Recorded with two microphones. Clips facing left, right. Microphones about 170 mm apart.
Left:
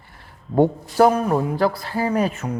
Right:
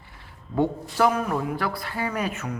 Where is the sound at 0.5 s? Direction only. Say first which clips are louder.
Left 7 dB; 40° left (ahead or behind).